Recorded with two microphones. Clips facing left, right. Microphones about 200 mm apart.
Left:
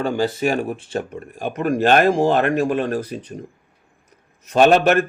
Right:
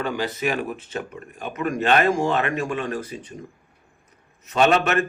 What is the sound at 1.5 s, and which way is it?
Speech, 50° left (ahead or behind).